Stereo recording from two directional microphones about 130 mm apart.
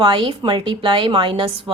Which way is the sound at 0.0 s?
40° right (ahead or behind).